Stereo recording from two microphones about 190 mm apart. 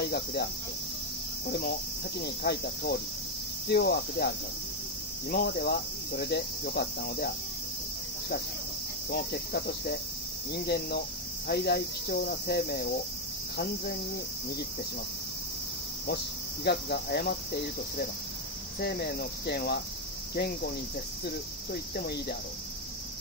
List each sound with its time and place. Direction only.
0.1 s cricket: 60° left (ahead or behind)
2.2 s cricket: 60° left (ahead or behind)
5.3 s cricket: 60° left (ahead or behind)
9.1 s cricket: 55° left (ahead or behind)
16.6 s cricket: 55° left (ahead or behind)
18.8 s cricket: 60° left (ahead or behind)
21.9 s cricket: 55° left (ahead or behind)